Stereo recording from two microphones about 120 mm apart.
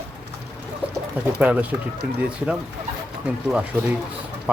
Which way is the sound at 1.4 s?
10° right (ahead or behind).